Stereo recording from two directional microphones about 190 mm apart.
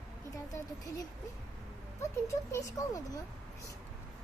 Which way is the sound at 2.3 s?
15° left (ahead or behind).